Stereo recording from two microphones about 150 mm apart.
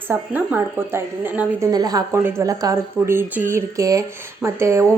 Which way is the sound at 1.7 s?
25° right (ahead or behind).